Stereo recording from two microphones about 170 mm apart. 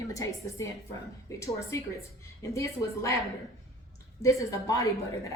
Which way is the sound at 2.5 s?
15° left (ahead or behind).